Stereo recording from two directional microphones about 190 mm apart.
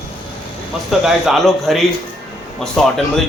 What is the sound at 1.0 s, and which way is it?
A man's voice, centre (ahead or behind).